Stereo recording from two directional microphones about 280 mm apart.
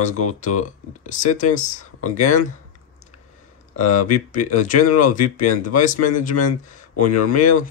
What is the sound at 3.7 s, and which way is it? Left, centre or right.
Speech, left.